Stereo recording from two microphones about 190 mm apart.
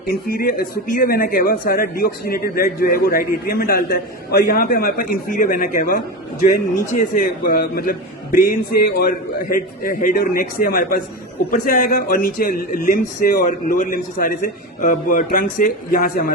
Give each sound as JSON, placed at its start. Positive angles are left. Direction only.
{"t": 0.1, "sound": "speech", "side_deg": 50}